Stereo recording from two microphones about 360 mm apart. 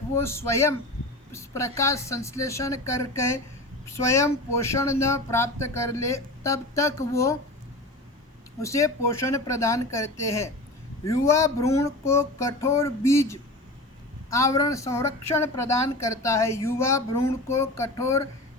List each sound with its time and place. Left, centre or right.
0.1 s a woman's voice: centre
8.6 s a woman's voice: centre